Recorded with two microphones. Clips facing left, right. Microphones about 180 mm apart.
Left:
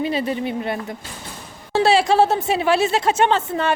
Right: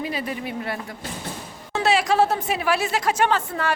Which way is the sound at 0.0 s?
25° left (ahead or behind).